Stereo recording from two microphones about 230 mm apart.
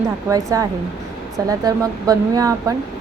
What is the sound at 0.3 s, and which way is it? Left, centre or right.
Speech, centre.